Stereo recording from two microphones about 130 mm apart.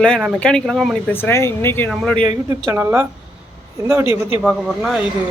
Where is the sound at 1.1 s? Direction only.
20° left (ahead or behind).